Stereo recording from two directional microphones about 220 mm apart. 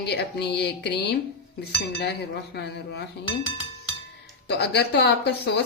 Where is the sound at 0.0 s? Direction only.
50° left (ahead or behind).